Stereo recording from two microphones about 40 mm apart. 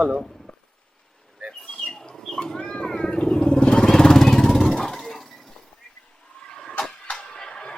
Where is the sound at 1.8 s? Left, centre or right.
Centre.